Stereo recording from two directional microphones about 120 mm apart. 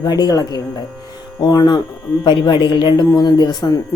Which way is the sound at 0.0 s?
35° left (ahead or behind).